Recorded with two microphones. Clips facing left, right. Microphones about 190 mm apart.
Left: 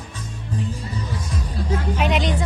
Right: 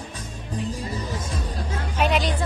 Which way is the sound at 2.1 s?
20° left (ahead or behind).